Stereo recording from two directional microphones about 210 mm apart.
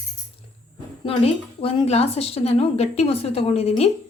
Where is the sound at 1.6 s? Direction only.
30° left (ahead or behind).